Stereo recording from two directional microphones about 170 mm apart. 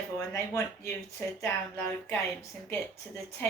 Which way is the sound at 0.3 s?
15° left (ahead or behind).